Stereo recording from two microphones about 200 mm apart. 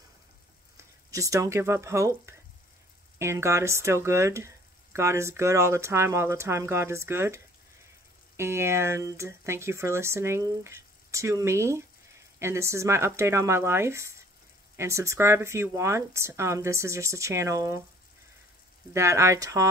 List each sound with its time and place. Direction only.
1.1 s speech: 15° right (ahead or behind)
18.9 s speech: 15° right (ahead or behind)